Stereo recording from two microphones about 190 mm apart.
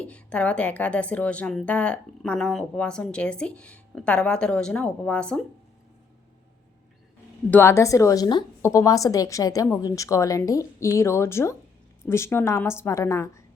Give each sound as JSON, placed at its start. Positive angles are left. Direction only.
{"t": 0.0, "sound": "a woman's voice", "side_deg": 5}
{"t": 7.5, "sound": "a woman's voice", "side_deg": 15}